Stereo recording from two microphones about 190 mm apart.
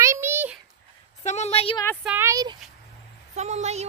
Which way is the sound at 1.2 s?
35° left (ahead or behind).